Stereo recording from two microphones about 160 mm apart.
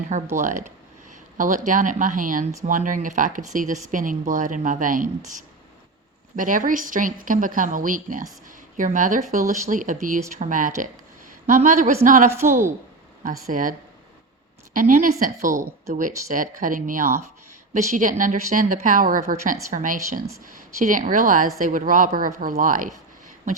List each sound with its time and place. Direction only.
0.3 s a woman's voice: 55° right (ahead or behind)
6.3 s a woman's voice: 55° right (ahead or behind)
13.5 s speech: 55° right (ahead or behind)